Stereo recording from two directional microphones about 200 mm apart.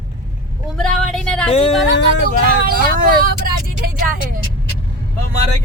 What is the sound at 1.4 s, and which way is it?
Speech, 30° left (ahead or behind).